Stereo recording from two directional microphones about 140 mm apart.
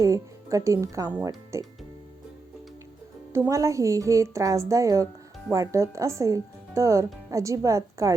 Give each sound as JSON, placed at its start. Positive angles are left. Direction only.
{"t": 0.0, "sound": "speech", "side_deg": -25}
{"t": 3.3, "sound": "speech", "side_deg": -20}